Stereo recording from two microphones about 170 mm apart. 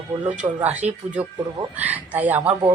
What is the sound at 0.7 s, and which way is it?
Speech, 40° right (ahead or behind).